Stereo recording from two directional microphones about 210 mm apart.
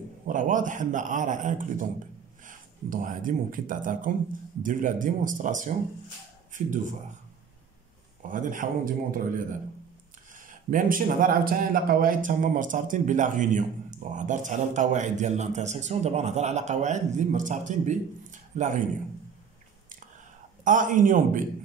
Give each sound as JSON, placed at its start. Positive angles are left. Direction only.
{"t": 0.3, "sound": "speech", "side_deg": -40}
{"t": 8.2, "sound": "speech", "side_deg": -40}
{"t": 20.6, "sound": "speech", "side_deg": -40}